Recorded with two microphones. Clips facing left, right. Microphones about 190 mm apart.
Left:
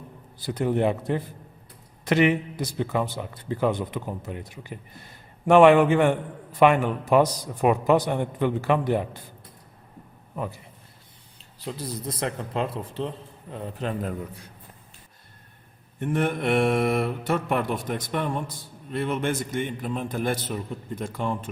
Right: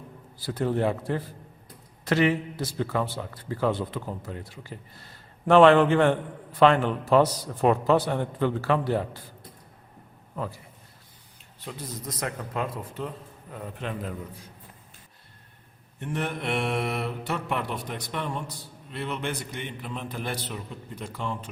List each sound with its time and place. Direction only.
0.3 s a man's voice: 20° left (ahead or behind)
10.3 s a man's voice: 15° left (ahead or behind)
11.6 s a man's voice: 35° left (ahead or behind)
16.0 s mantra: 50° left (ahead or behind)